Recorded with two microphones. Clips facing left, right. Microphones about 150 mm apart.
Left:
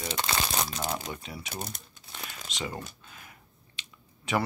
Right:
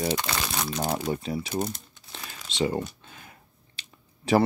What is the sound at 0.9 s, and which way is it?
Crumpling, 35° right (ahead or behind).